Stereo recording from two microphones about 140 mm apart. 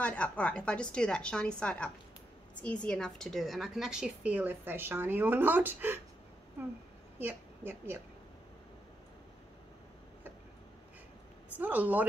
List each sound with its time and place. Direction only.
0.0 s a woman's voice: 10° left (ahead or behind); by 5.9 s 15° right (ahead or behind)
7.2 s a woman's voice: 15° right (ahead or behind)
11.5 s a woman's voice: 10° right (ahead or behind)